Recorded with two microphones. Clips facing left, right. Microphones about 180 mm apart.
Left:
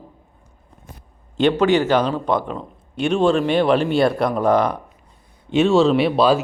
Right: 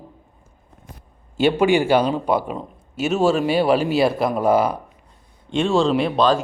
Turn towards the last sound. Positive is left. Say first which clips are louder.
# left 2 dB
turn(degrees=5)  # may be behind; listen again after turning